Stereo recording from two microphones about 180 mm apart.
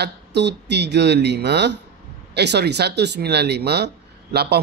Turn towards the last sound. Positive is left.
turn(degrees=-65)  # may be behind; listen again after turning